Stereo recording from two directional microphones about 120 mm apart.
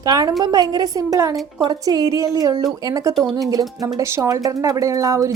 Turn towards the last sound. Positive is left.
turn(degrees=-30)  # may be behind; listen again after turning